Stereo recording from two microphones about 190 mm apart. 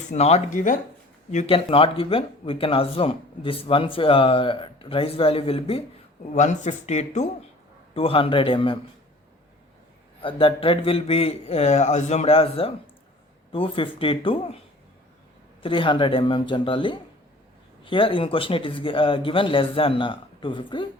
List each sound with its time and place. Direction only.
0.1 s a man's voice: 35° left (ahead or behind)
10.2 s a man's voice: 30° left (ahead or behind)
15.6 s speech: 25° left (ahead or behind)